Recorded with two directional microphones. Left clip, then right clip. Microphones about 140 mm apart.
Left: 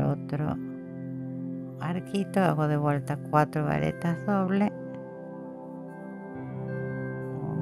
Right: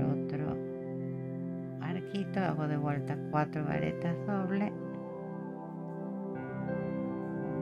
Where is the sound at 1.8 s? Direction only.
65° left (ahead or behind).